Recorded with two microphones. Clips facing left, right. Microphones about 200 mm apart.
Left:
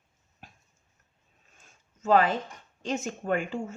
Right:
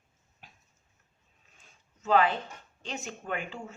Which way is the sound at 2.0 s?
45° left (ahead or behind).